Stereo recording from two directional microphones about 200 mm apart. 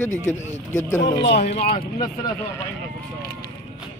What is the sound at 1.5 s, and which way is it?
Speech, 30° left (ahead or behind).